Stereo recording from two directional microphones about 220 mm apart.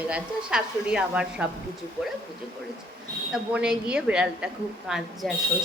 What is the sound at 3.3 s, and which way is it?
A woman's voice, 5° right (ahead or behind).